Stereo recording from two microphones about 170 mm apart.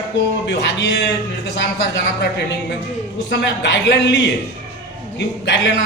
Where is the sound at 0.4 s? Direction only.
90° left.